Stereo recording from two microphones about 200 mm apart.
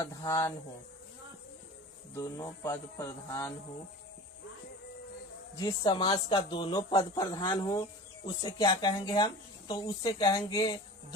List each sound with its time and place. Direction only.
0.0 s speech: 15° left (ahead or behind)
2.1 s speech: 15° left (ahead or behind)
5.5 s speech: 20° left (ahead or behind)